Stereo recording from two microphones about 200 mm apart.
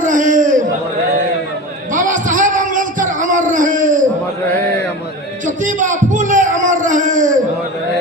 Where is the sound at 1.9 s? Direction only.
40° right (ahead or behind).